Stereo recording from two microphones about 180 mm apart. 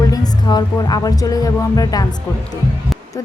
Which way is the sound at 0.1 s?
20° left (ahead or behind).